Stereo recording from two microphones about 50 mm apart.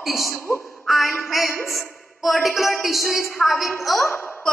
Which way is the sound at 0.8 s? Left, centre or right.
Centre.